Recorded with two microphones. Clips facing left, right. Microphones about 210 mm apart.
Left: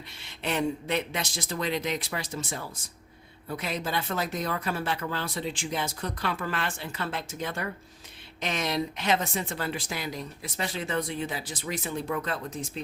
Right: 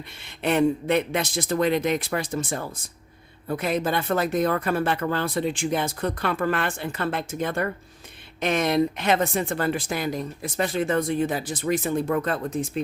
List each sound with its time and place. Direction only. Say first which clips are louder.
0.2 s speech: right 8 dB; 55° right (ahead or behind)